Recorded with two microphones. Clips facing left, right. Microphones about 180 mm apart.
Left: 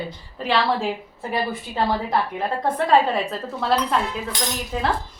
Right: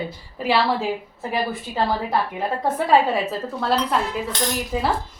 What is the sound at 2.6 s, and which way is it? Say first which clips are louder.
Speech: even; 5° right (ahead or behind).